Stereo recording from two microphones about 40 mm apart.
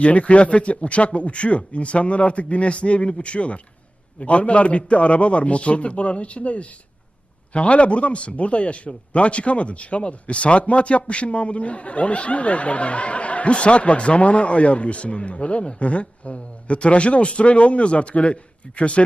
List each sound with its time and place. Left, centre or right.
0.0 s speech: left